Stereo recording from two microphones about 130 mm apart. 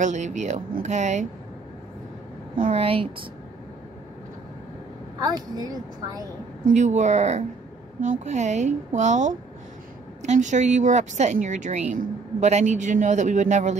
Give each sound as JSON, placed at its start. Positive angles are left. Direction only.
{"t": 0.0, "sound": "a woman's voice", "side_deg": -65}
{"t": 2.7, "sound": "speech", "side_deg": -50}
{"t": 5.7, "sound": "a woman's voice", "side_deg": -30}
{"t": 6.6, "sound": "a woman's voice", "side_deg": -65}